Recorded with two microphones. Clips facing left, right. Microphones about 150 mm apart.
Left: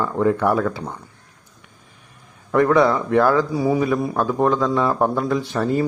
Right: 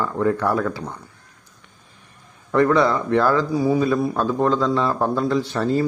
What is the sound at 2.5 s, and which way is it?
A man's voice, 10° left (ahead or behind).